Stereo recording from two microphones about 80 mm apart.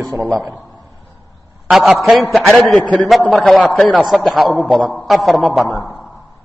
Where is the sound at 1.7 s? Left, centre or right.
Centre.